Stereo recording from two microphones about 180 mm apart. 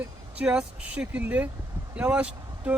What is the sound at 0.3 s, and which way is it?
Speech, 5° right (ahead or behind).